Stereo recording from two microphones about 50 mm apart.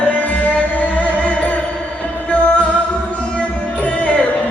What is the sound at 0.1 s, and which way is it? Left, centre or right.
Music, left.